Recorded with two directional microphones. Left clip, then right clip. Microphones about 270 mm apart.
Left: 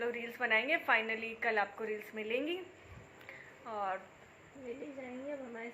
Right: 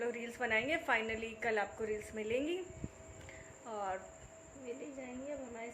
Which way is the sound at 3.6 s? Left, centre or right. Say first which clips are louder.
Left 2 dB; centre.